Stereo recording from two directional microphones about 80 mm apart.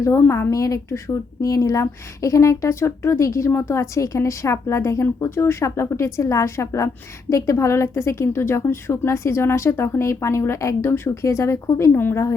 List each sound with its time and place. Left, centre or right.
0.0 s a woman's voice: left